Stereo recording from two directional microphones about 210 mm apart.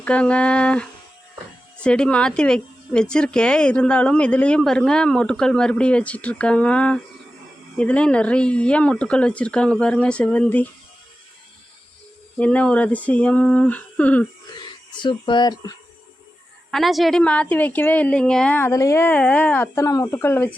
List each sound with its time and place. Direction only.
0.0 s speech: 5° left (ahead or behind)
12.4 s a woman's voice: 5° left (ahead or behind)
14.5 s speech: 20° left (ahead or behind)
16.7 s a woman's voice: centre (ahead or behind)